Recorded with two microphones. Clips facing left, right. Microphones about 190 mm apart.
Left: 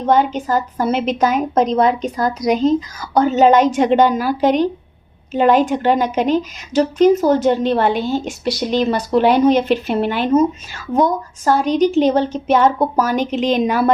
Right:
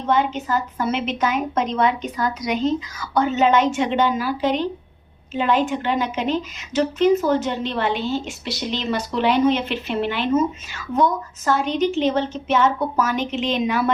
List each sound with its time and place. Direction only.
0.0 s a woman's voice: 40° left (ahead or behind)